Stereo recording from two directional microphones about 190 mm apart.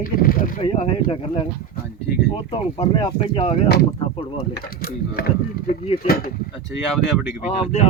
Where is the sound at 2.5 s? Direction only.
25° left (ahead or behind).